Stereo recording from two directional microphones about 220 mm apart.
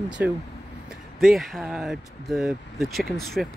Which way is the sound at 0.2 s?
10° right (ahead or behind).